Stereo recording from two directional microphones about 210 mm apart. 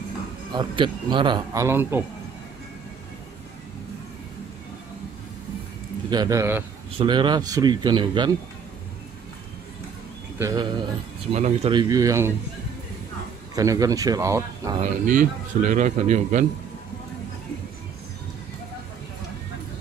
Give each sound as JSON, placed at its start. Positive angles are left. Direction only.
{"t": 0.6, "sound": "speech", "side_deg": -20}
{"t": 6.0, "sound": "speech", "side_deg": -20}
{"t": 10.4, "sound": "speech", "side_deg": -20}
{"t": 11.3, "sound": "a man's voice", "side_deg": -30}
{"t": 11.9, "sound": "speech", "side_deg": -15}
{"t": 13.6, "sound": "speech", "side_deg": -15}
{"t": 14.8, "sound": "a man's voice", "side_deg": -40}